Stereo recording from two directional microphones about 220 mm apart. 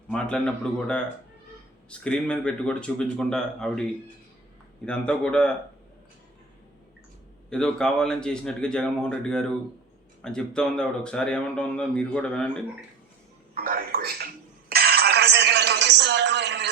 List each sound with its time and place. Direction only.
0.1 s speech: 5° left (ahead or behind)
4.9 s speech: 5° left (ahead or behind)
7.5 s speech: 5° left (ahead or behind)
13.5 s a sound: 40° right (ahead or behind)